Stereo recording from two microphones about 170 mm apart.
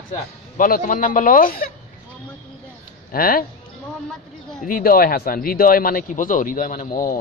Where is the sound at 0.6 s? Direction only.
55° left (ahead or behind).